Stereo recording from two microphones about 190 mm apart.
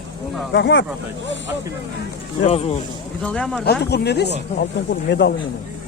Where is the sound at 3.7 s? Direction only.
60° left (ahead or behind).